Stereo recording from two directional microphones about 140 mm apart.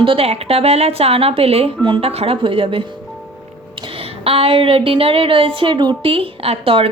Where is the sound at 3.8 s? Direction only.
40° right (ahead or behind).